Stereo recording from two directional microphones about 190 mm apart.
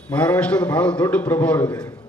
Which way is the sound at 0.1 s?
5° left (ahead or behind).